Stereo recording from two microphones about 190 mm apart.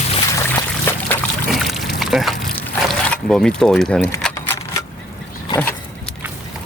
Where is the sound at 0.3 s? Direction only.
10° left (ahead or behind).